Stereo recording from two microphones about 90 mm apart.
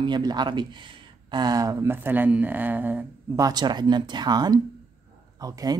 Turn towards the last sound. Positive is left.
turn(degrees=-45)  # may be behind; listen again after turning